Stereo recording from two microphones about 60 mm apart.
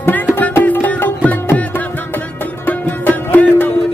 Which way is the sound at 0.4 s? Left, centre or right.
Left.